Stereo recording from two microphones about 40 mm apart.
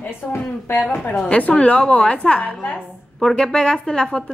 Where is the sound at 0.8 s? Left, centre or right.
Left.